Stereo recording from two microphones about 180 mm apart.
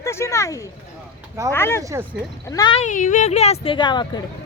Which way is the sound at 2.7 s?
45° left (ahead or behind).